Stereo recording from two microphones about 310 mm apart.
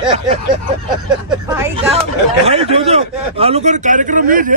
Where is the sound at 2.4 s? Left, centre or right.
Centre.